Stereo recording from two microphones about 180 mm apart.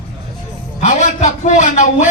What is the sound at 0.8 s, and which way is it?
A man's voice, 40° left (ahead or behind).